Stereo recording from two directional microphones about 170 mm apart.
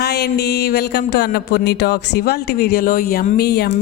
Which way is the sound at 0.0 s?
75° left (ahead or behind).